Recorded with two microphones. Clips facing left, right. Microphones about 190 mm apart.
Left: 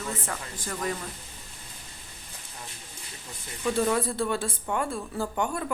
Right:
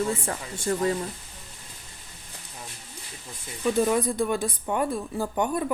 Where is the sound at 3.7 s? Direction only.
15° right (ahead or behind).